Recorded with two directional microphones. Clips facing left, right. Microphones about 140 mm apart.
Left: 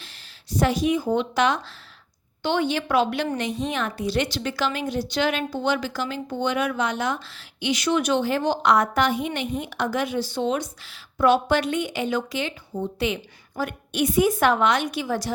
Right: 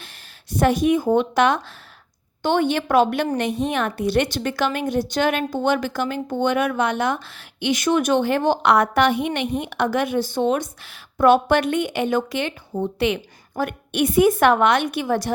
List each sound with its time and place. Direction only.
0.0 s a woman's voice: 55° right (ahead or behind)